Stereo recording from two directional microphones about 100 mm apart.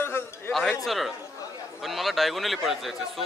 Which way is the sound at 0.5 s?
Centre (ahead or behind).